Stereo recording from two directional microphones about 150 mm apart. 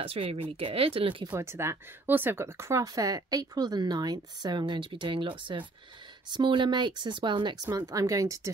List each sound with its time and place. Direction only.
0.0 s speech: 40° right (ahead or behind)
1.3 s speech: 15° right (ahead or behind)